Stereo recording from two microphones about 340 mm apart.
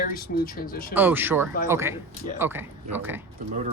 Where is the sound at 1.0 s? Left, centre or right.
Centre.